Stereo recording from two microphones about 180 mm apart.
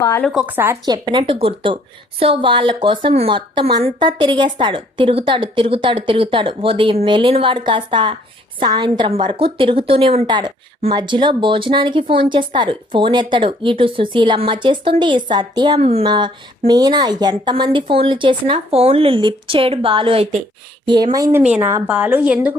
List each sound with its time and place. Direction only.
0.2 s a woman's voice: centre (ahead or behind)
0.9 s a woman's voice: 25° right (ahead or behind); by 22.5 s 10° right (ahead or behind)